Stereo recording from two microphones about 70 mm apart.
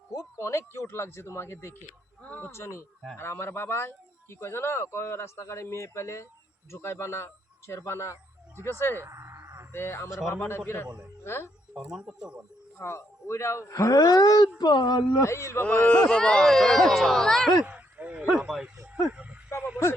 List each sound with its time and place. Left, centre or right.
0.1 s speech: left
2.2 s speech: left
2.5 s a man's voice: left
9.0 s a sound: right
9.7 s speech: left
11.7 s speech: centre
12.8 s a man's voice: left
14.6 s speech: left
15.2 s a man's voice: left
15.6 s speech: centre
17.7 s a sound: right
18.4 s speech: centre
19.1 s a sound: centre